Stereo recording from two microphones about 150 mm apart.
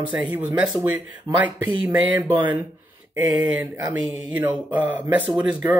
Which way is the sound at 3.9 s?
10° right (ahead or behind).